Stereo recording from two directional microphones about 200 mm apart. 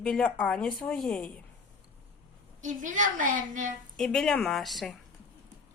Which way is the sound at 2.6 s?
40° right (ahead or behind).